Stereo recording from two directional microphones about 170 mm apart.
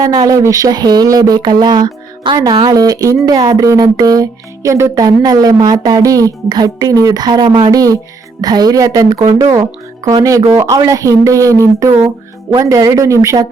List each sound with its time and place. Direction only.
0.0 s speech: 20° right (ahead or behind)